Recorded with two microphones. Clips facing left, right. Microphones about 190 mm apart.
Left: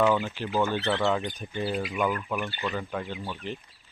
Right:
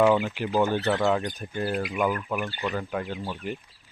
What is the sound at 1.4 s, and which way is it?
Speech, 5° right (ahead or behind).